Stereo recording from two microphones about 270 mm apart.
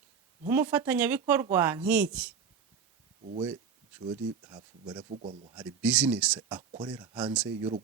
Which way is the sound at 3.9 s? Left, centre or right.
Centre.